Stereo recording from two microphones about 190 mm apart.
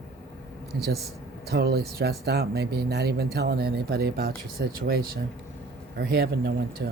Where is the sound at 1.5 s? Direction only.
60° right (ahead or behind).